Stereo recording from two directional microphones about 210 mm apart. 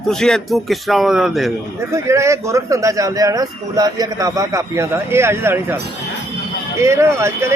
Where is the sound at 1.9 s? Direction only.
15° right (ahead or behind).